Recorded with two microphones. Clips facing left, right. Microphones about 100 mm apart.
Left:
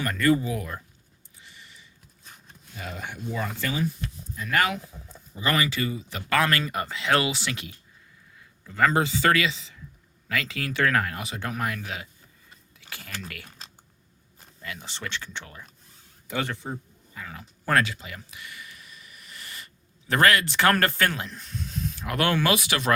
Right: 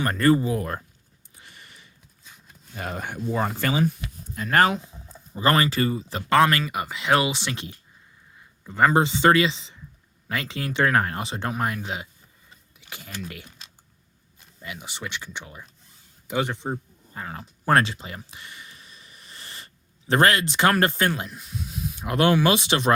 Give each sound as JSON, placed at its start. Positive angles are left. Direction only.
{"t": 0.0, "sound": "speech", "side_deg": -35}
{"t": 1.4, "sound": "a sound", "side_deg": -55}
{"t": 2.7, "sound": "speech", "side_deg": -50}
{"t": 3.7, "sound": "speech", "side_deg": -75}
{"t": 4.4, "sound": "speech", "side_deg": -35}
{"t": 6.7, "sound": "speech", "side_deg": -10}
{"t": 14.6, "sound": "speech", "side_deg": -15}
{"t": 17.2, "sound": "speech", "side_deg": -40}
{"t": 17.7, "sound": "a sound", "side_deg": -30}
{"t": 21.2, "sound": "speech", "side_deg": -10}
{"t": 22.0, "sound": "speech", "side_deg": -20}